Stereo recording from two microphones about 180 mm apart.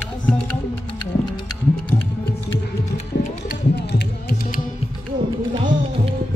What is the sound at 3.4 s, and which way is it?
Music, 65° left (ahead or behind).